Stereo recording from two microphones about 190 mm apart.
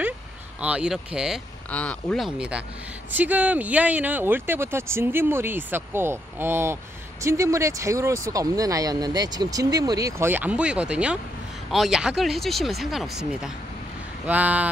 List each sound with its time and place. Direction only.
0.6 s speech: 5° right (ahead or behind)